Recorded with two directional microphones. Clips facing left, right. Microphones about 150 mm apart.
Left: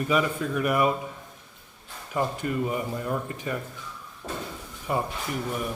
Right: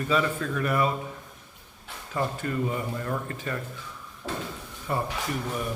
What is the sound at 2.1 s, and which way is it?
Speech, 15° left (ahead or behind).